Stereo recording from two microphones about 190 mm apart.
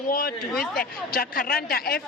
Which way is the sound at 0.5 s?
Centre (ahead or behind).